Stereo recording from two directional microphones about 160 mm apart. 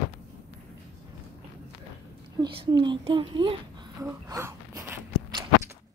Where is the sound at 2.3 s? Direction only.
30° right (ahead or behind).